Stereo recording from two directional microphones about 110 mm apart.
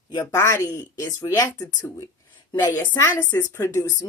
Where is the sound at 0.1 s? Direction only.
40° left (ahead or behind).